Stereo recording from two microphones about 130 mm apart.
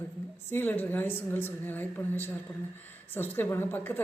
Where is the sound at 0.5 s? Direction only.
15° left (ahead or behind).